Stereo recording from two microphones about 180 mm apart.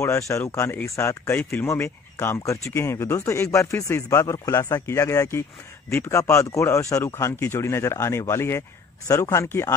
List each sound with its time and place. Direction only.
0.0 s speech: 15° left (ahead or behind)